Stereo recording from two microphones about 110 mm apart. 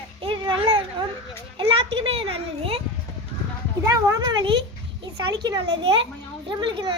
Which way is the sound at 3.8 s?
35° right (ahead or behind).